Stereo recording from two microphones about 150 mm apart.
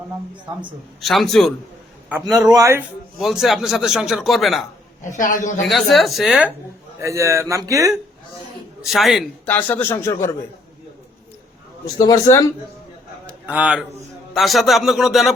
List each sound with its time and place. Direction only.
1.0 s a man's voice: centre (ahead or behind)
2.5 s a man's voice: 20° right (ahead or behind)
3.2 s a man's voice: centre (ahead or behind)
5.0 s a woman's voice: 60° left (ahead or behind)
5.6 s a man's voice: centre (ahead or behind)
7.0 s a man's voice: 20° right (ahead or behind)
8.8 s a man's voice: centre (ahead or behind)
9.5 s speech: 10° left (ahead or behind)
12.0 s speech: 20° left (ahead or behind)
13.2 s a sound: 10° right (ahead or behind)
14.3 s a man's voice: centre (ahead or behind)